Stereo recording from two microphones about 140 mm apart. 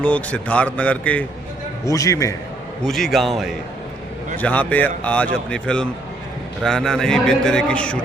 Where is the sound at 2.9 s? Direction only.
Centre (ahead or behind).